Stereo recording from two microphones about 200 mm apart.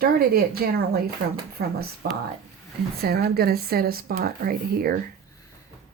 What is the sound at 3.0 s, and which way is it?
Speech, 50° right (ahead or behind).